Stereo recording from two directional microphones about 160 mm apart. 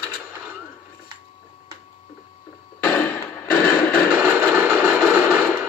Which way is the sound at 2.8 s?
15° left (ahead or behind).